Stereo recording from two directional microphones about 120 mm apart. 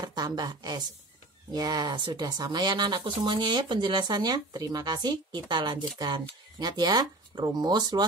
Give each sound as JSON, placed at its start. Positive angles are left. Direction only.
{"t": 0.0, "sound": "a woman's voice", "side_deg": -35}